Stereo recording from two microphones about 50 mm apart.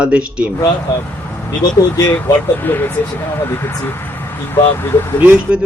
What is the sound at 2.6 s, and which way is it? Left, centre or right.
Speech, left.